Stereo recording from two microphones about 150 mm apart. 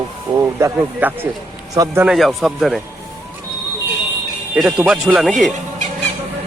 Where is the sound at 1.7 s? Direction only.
25° right (ahead or behind).